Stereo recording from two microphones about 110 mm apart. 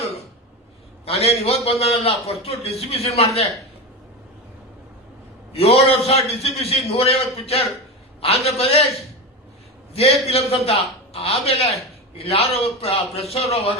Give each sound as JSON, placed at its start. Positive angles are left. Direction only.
{"t": 1.0, "sound": "a man's voice", "side_deg": 65}
{"t": 5.5, "sound": "a man's voice", "side_deg": 65}
{"t": 9.9, "sound": "a man's voice", "side_deg": 65}